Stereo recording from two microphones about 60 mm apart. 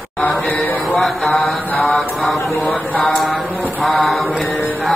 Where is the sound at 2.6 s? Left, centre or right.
Centre.